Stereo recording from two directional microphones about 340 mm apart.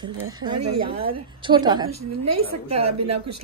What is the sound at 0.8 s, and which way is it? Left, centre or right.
Speech, centre.